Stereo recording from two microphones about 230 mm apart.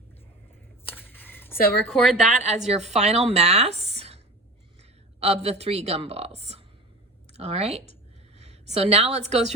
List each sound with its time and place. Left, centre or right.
0.9 s a sound: centre
1.5 s a woman's voice: left
1.9 s speech: centre
2.4 s a woman's voice: right